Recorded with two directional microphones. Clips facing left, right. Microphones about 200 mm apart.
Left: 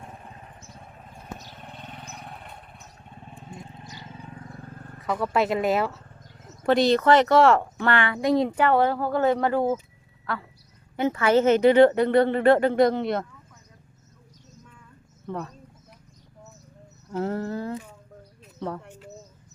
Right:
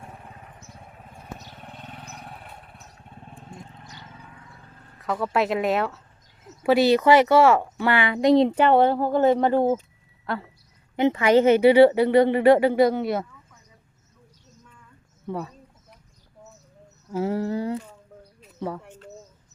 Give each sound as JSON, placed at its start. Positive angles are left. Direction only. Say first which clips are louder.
{"t": 1.5, "sound": "vehicle", "louder": "even", "side_deg": -5}
{"t": 4.1, "sound": "a sound", "louder": "left 5 dB", "side_deg": 25}
{"t": 4.4, "sound": "vehicle", "louder": "left 8 dB", "side_deg": 45}
{"t": 4.9, "sound": "speech", "louder": "even", "side_deg": 0}
{"t": 8.2, "sound": "speech", "louder": "right 6 dB", "side_deg": -25}
{"t": 10.9, "sound": "speech", "louder": "right 3 dB", "side_deg": -20}
{"t": 15.3, "sound": "speech", "louder": "right 2 dB", "side_deg": -10}
{"t": 17.1, "sound": "speech", "louder": "right 3 dB", "side_deg": -10}
{"t": 18.4, "sound": "a sound", "louder": "right 1 dB", "side_deg": -5}
{"t": 18.9, "sound": "bird", "louder": "even", "side_deg": 5}